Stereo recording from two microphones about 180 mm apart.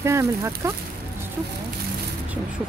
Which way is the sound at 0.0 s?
15° right (ahead or behind).